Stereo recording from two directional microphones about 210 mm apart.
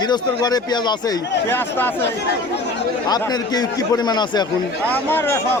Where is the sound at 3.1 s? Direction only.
20° left (ahead or behind).